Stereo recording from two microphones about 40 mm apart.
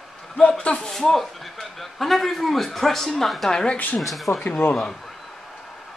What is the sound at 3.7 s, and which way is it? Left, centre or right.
Speech, left.